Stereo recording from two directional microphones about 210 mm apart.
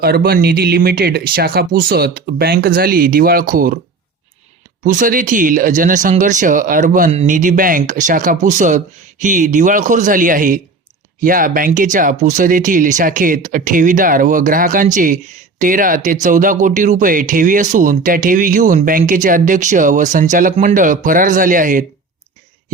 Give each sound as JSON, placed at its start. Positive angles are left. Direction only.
{"t": 0.0, "sound": "speech", "side_deg": -50}
{"t": 4.8, "sound": "speech", "side_deg": -40}